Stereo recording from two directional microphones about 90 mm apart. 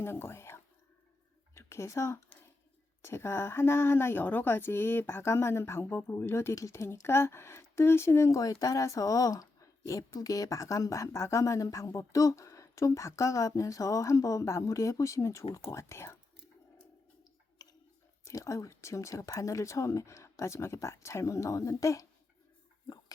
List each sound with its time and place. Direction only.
0.0 s whispering: 25° left (ahead or behind)
1.5 s a woman's voice: 35° left (ahead or behind)
17.6 s a sound: 45° left (ahead or behind)
18.3 s a woman's voice: 35° left (ahead or behind)